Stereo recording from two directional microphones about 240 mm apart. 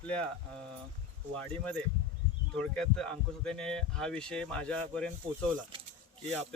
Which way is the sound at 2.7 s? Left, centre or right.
Centre.